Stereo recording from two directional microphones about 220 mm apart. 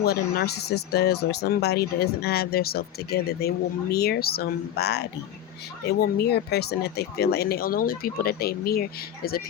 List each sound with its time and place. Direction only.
0.0 s speech: 45° left (ahead or behind)